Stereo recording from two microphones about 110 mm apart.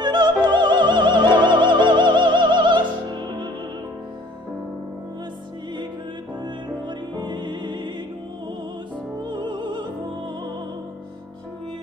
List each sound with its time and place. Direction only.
0.0 s opera: 45° right (ahead or behind)
6.4 s music: 45° right (ahead or behind)
9.2 s music: 45° right (ahead or behind)